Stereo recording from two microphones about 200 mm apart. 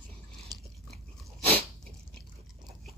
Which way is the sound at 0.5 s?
20° right (ahead or behind).